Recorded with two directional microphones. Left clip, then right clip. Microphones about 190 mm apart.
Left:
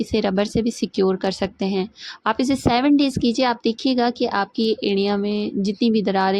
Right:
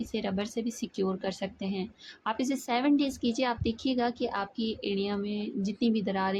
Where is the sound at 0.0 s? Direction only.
40° left (ahead or behind).